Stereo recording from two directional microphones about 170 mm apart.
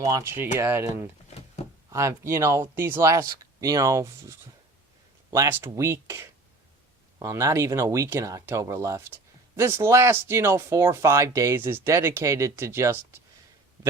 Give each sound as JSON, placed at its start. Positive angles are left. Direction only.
{"t": 0.0, "sound": "speech", "side_deg": -20}